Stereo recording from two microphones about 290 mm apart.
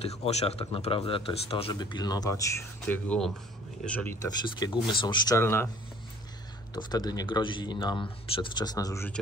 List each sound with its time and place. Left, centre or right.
0.0 s speech: left
6.7 s speech: centre